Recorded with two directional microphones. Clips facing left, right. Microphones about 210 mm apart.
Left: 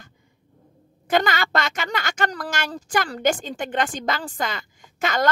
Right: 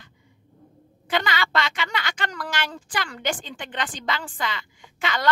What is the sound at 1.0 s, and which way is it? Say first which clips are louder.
A woman's voice: left 4 dB; 45° left (ahead or behind).